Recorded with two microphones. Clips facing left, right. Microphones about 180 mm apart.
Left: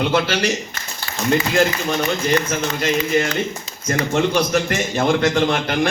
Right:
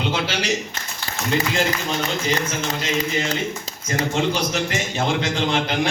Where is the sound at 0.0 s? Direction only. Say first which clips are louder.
Left 5 dB; 55° left (ahead or behind).